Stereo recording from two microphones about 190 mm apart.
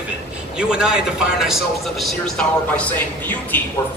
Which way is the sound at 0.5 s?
5° right (ahead or behind).